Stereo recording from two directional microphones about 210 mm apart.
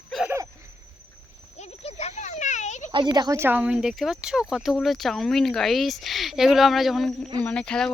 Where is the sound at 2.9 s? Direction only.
20° right (ahead or behind).